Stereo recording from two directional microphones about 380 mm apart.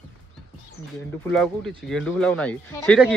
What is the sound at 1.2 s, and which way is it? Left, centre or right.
Speech, centre.